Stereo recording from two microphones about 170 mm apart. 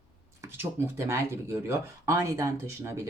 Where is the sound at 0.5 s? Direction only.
15° right (ahead or behind).